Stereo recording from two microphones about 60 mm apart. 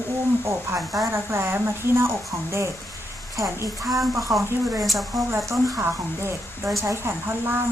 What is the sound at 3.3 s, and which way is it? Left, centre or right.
Speech, right.